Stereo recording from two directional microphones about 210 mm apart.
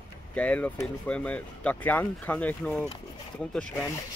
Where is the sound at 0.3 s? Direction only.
5° left (ahead or behind).